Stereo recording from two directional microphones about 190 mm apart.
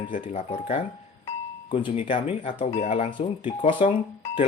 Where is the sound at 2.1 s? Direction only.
30° left (ahead or behind).